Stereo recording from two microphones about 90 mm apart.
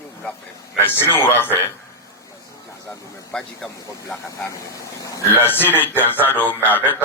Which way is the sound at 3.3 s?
5° left (ahead or behind).